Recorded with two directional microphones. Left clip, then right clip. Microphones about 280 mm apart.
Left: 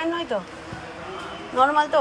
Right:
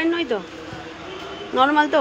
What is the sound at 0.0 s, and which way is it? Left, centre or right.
Vehicle, centre.